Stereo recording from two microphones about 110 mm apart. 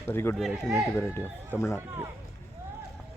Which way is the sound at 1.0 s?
20° left (ahead or behind).